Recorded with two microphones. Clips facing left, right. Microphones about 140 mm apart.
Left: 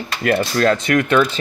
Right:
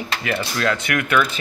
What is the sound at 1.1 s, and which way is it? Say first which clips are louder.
Speech: left 2 dB; 30° left (ahead or behind).